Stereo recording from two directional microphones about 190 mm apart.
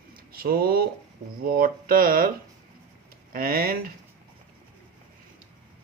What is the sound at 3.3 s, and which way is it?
Speech, 50° right (ahead or behind).